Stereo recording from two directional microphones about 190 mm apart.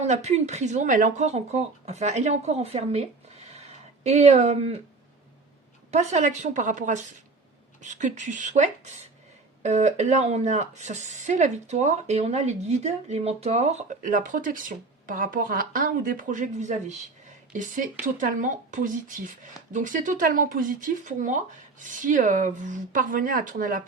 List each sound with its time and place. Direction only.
0.0 s speech: 35° right (ahead or behind)
3.5 s a sound: 35° right (ahead or behind)
5.9 s speech: 35° right (ahead or behind)